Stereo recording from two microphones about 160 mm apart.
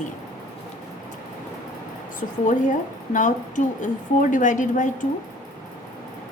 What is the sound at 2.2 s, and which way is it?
Speech, 55° left (ahead or behind).